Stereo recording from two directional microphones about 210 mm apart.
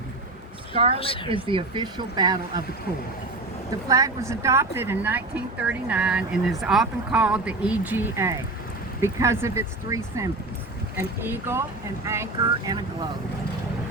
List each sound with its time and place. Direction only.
0.7 s a woman's voice: 25° right (ahead or behind)
0.9 s a woman's voice: 25° left (ahead or behind)
1.3 s speech: 25° right (ahead or behind)
3.8 s speech: 15° right (ahead or behind)